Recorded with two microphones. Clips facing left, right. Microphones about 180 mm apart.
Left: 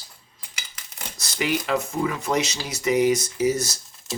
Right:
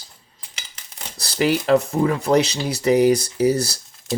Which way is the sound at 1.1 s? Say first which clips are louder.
Right 6 dB; 35° right (ahead or behind).